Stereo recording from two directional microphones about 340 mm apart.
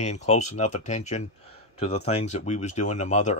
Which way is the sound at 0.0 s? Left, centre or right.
Centre.